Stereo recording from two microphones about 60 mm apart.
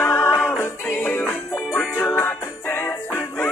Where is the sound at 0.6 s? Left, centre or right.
Left.